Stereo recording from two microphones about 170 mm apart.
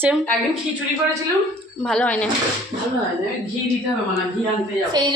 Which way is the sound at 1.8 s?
5° left (ahead or behind).